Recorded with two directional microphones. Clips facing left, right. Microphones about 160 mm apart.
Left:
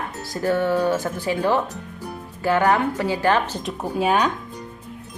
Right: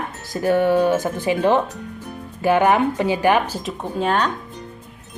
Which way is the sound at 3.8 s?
10° left (ahead or behind).